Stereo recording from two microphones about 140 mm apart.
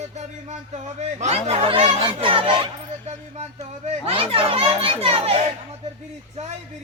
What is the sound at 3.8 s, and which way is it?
Speech, 40° right (ahead or behind).